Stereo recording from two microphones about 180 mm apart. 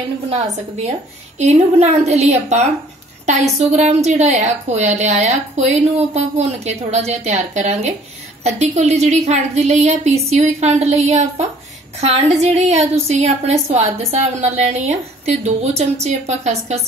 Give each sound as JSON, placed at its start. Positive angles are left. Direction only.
{"t": 0.3, "sound": "a woman's voice", "side_deg": -40}